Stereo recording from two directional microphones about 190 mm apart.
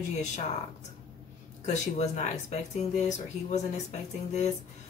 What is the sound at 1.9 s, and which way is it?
Speech, 35° left (ahead or behind).